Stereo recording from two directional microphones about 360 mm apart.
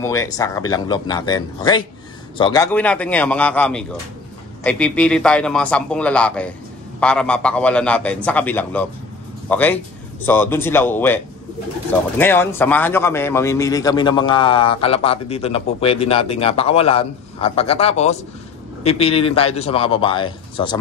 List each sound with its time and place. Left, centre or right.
0.0 s a man's voice: centre